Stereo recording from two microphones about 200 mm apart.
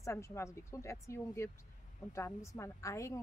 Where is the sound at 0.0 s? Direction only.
15° left (ahead or behind).